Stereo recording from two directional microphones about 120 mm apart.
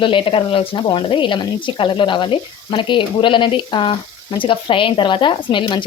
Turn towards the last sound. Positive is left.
turn(degrees=40)  # may be behind; listen again after turning